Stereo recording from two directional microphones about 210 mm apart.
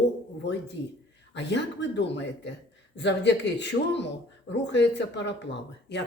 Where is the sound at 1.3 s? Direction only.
55° left (ahead or behind).